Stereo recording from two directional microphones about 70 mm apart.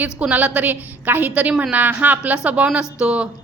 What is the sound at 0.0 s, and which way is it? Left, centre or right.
A woman's voice, right.